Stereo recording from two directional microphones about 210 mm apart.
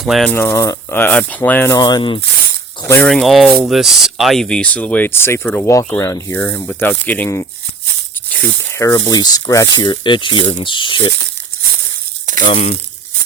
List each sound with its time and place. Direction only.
0.0 s speech: centre (ahead or behind); by 2.2 s 20° left (ahead or behind)
2.8 s speech: 10° left (ahead or behind)
12.5 s speech: 30° left (ahead or behind)